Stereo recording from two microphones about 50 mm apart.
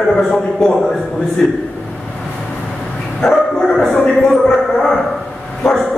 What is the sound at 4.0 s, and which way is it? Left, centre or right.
Speech, centre.